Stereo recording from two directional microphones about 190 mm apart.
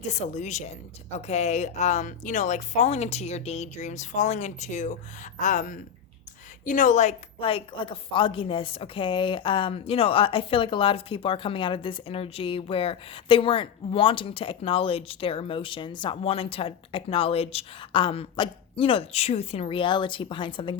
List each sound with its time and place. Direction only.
0.0 s a woman's voice: 35° left (ahead or behind)